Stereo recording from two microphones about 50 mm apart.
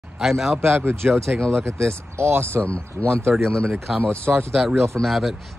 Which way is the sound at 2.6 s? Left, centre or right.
Left.